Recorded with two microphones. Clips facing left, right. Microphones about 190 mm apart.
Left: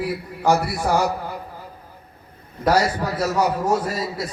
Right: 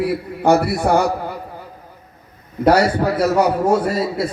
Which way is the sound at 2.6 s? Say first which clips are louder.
Right 5 dB; 60° right (ahead or behind).